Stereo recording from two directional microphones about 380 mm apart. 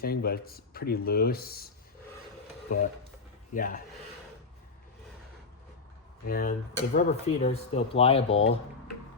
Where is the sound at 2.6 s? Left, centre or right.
Left.